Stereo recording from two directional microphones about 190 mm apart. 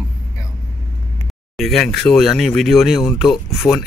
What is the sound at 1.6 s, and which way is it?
Speech, centre (ahead or behind).